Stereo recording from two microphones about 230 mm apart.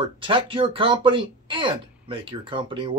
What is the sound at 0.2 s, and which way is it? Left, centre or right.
Speech, right.